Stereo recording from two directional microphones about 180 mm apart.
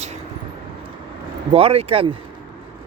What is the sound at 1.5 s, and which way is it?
Speech, 35° right (ahead or behind).